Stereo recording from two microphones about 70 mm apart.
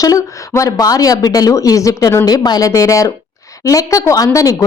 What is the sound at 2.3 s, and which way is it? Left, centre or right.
Speech, left.